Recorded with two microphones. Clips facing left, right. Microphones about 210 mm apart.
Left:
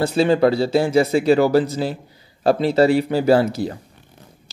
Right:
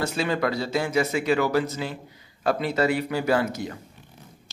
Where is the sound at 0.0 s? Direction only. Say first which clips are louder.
Left 9 dB; 30° left (ahead or behind).